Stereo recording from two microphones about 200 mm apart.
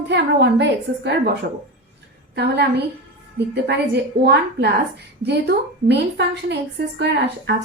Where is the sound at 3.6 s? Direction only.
55° right (ahead or behind).